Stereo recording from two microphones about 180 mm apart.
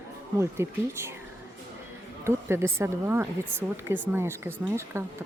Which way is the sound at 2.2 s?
15° right (ahead or behind).